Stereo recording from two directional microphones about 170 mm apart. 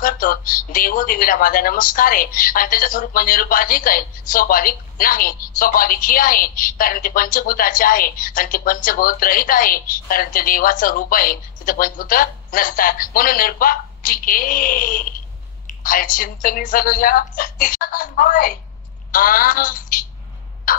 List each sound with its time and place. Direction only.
0.0 s a woman's voice: 55° left (ahead or behind)
20.7 s crow: 55° left (ahead or behind)